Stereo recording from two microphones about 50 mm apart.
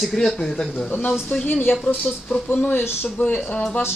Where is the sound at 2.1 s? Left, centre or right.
Left.